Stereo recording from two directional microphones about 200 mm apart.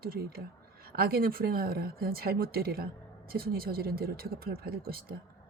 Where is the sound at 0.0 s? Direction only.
50° right (ahead or behind).